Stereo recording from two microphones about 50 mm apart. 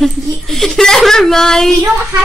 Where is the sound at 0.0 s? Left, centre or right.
Centre.